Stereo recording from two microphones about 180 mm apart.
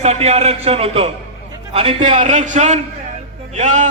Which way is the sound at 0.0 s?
35° right (ahead or behind).